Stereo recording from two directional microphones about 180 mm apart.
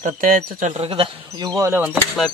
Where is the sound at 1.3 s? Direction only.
20° right (ahead or behind).